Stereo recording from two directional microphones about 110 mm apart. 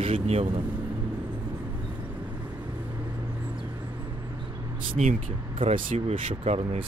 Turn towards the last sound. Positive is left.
turn(degrees=-60)  # may be behind; listen again after turning